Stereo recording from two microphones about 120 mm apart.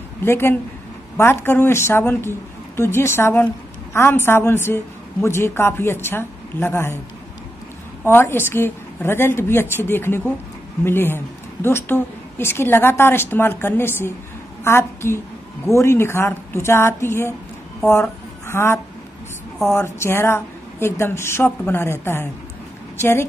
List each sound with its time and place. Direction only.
0.2 s a woman's voice: 20° left (ahead or behind)
8.0 s a woman's voice: 20° left (ahead or behind)
18.5 s a woman's voice: 20° left (ahead or behind)